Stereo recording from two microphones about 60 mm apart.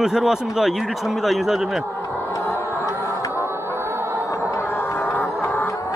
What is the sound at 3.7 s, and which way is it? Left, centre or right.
Music, right.